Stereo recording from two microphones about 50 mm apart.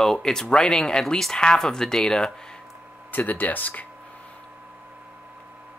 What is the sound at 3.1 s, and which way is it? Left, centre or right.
Speech, left.